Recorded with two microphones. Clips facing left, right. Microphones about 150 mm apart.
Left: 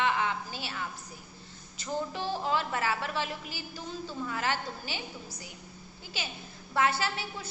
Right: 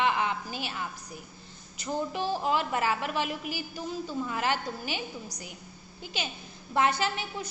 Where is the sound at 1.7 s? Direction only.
15° right (ahead or behind).